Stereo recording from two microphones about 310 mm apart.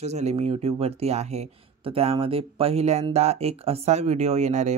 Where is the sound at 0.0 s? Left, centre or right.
Right.